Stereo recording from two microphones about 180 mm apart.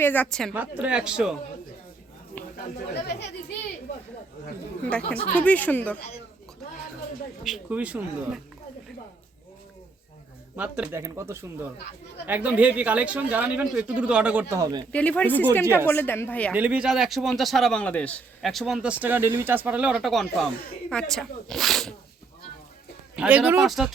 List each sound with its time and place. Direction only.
0.0 s a man's voice: 10° left (ahead or behind)
0.5 s a man's voice: 10° right (ahead or behind)
4.9 s speech: 5° left (ahead or behind)
7.4 s speech: 5° right (ahead or behind)
10.6 s speech: 10° right (ahead or behind)
14.6 s speech: 25° right (ahead or behind)
14.9 s speech: 5° left (ahead or behind)
15.6 s speech: 15° right (ahead or behind)
15.9 s speech: 10° left (ahead or behind)
16.5 s a man's voice: 10° right (ahead or behind)
23.1 s a man's voice: 5° right (ahead or behind)